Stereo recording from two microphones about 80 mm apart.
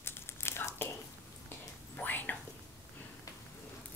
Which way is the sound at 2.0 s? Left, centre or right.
Left.